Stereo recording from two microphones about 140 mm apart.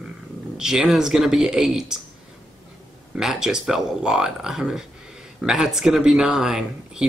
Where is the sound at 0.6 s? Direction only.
5° right (ahead or behind).